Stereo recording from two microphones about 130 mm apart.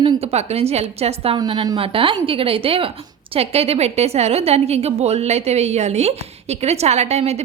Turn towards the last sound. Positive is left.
turn(degrees=-60)  # may be behind; listen again after turning